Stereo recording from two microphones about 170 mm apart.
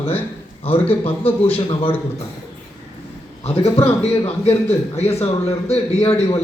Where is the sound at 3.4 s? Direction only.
35° left (ahead or behind).